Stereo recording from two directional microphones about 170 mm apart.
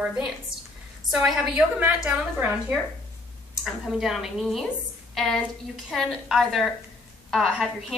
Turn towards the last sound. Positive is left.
turn(degrees=0)  # may be behind; listen again after turning